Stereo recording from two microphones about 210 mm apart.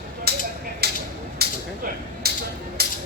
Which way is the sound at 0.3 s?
50° right (ahead or behind).